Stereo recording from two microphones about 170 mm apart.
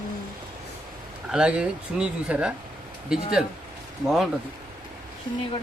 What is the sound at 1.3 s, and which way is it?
Speech, 5° right (ahead or behind).